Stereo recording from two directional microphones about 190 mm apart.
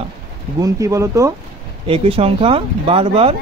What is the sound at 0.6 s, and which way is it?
Speech, 15° right (ahead or behind).